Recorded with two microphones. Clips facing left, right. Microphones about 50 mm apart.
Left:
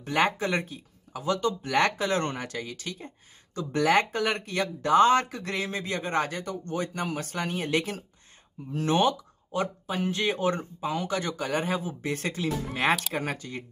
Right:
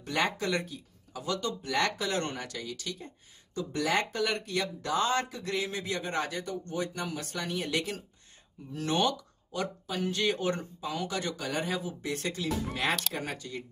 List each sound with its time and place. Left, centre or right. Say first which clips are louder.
0.0 s speech: left 5 dB; left